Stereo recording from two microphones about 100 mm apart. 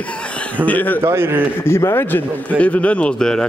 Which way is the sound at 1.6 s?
25° left (ahead or behind).